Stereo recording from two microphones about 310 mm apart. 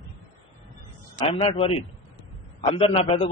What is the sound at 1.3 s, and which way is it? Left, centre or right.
A man's voice, centre.